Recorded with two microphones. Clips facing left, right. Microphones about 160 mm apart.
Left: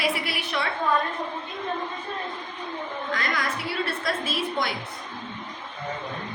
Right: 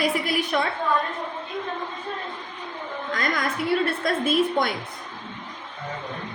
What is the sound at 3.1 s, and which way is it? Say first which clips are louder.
A woman's voice: right 3 dB; 45° right (ahead or behind).